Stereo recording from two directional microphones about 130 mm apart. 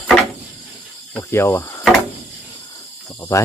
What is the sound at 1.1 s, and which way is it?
Speech, 20° left (ahead or behind).